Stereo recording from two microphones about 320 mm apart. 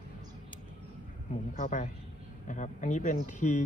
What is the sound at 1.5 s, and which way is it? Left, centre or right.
Speech, left.